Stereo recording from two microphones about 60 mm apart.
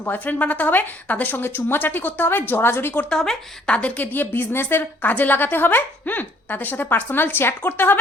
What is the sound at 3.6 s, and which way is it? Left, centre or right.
A woman's voice, left.